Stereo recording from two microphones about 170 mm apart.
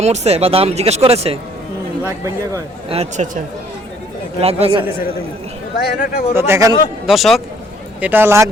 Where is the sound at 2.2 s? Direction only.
20° right (ahead or behind).